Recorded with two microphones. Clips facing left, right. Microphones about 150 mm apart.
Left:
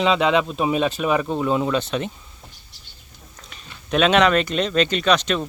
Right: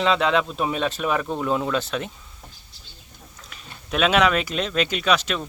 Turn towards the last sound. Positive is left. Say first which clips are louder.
# left 3 dB
turn(degrees=-5)  # may be behind; listen again after turning